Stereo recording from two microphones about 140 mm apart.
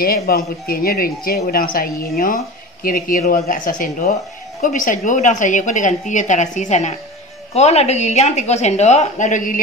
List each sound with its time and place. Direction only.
0.0 s a woman's voice: 90° left; by 9.6 s 65° left (ahead or behind)